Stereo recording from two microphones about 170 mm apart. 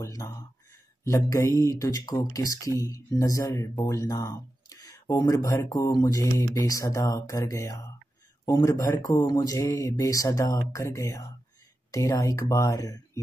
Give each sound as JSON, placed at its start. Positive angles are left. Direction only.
{"t": 0.0, "sound": "speech", "side_deg": 20}